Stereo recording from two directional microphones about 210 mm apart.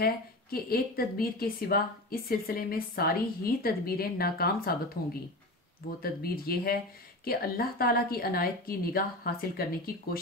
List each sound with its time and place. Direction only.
0.0 s a woman's voice: 45° left (ahead or behind)
6.0 s a woman's voice: 45° left (ahead or behind)